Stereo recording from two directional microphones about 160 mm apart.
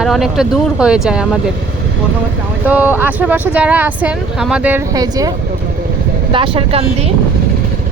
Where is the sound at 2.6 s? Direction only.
10° right (ahead or behind).